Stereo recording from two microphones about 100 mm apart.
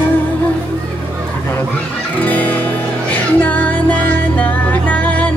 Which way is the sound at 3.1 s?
15° left (ahead or behind).